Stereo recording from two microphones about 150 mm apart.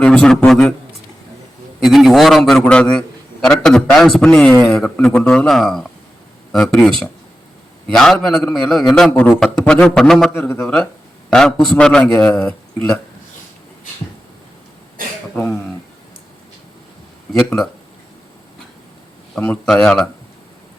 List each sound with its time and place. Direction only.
0.0 s a man's voice: 5° left (ahead or behind)
1.8 s a man's voice: centre (ahead or behind)
15.0 s throat clearing: 70° right (ahead or behind)
19.4 s a man's voice: 5° left (ahead or behind)